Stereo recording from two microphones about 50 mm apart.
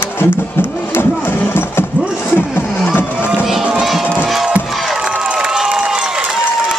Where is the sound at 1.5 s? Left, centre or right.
Left.